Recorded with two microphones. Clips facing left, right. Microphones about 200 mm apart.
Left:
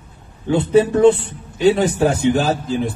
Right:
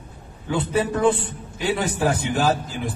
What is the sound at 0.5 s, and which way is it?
A man's voice, 25° left (ahead or behind).